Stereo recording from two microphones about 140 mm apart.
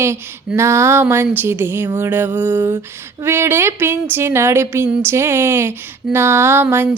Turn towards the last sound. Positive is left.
turn(degrees=-15)  # may be behind; listen again after turning